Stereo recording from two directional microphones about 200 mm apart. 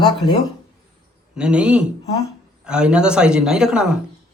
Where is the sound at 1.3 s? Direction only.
5° right (ahead or behind).